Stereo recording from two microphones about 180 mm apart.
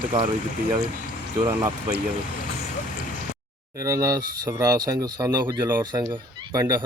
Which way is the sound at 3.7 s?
20° right (ahead or behind).